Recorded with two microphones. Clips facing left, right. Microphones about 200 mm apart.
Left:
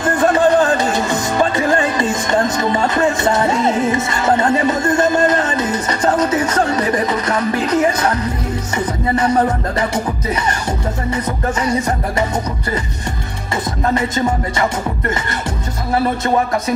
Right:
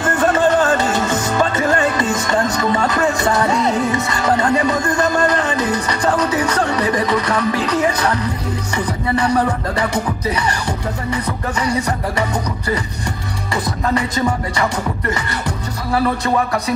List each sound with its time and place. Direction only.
0.2 s music: 15° left (ahead or behind)
2.7 s music: 20° left (ahead or behind)
9.2 s music: 30° left (ahead or behind)